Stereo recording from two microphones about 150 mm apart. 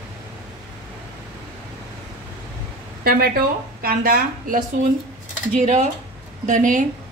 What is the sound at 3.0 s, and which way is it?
A woman's voice, 80° right.